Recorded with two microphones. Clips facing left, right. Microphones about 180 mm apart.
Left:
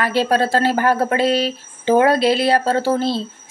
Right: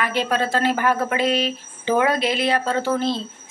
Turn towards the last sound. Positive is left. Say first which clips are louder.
# left 3 dB
turn(degrees=35)  # may be behind; listen again after turning